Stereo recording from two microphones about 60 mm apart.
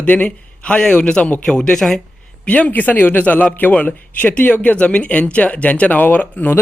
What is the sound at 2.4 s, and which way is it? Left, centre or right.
A man's voice, left.